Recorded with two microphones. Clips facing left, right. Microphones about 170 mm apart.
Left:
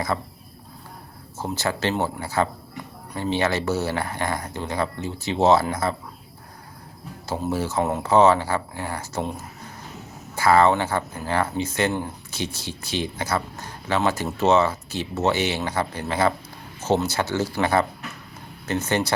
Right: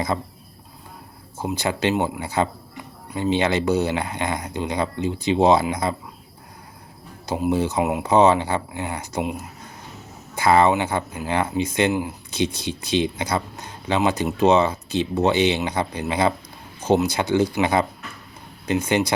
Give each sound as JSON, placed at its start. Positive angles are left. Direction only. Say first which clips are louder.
{"t": 0.1, "sound": "speech", "louder": "right 1 dB", "side_deg": -20}
{"t": 1.4, "sound": "speech", "louder": "right 2 dB", "side_deg": -15}
{"t": 7.3, "sound": "speech", "louder": "right 4 dB", "side_deg": -15}
{"t": 10.3, "sound": "speech", "louder": "right 1 dB", "side_deg": -20}